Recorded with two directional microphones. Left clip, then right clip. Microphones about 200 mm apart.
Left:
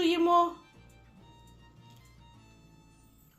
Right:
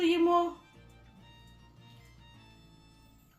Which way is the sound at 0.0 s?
25° left (ahead or behind).